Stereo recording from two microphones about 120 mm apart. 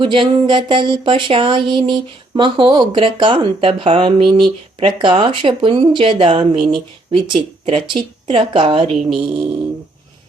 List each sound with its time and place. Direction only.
0.0 s speech: 45° right (ahead or behind)